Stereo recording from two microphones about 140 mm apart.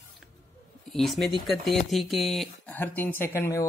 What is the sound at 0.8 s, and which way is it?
Speech, centre (ahead or behind).